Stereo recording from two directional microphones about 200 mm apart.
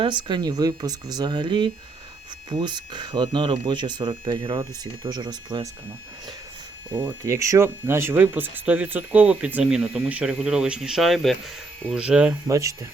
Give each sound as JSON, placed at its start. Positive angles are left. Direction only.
{"t": 0.0, "sound": "speech", "side_deg": -25}
{"t": 6.9, "sound": "speech", "side_deg": -20}